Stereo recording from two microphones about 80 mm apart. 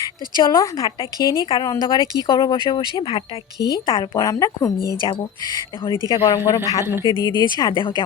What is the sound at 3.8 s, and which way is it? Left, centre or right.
Speech, left.